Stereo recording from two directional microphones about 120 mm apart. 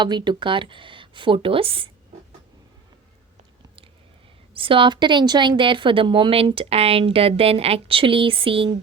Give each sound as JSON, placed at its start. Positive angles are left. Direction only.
{"t": 0.0, "sound": "a woman's voice", "side_deg": -40}
{"t": 4.5, "sound": "a woman's voice", "side_deg": -45}